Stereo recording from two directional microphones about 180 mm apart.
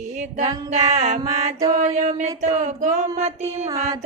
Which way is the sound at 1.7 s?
45° right (ahead or behind).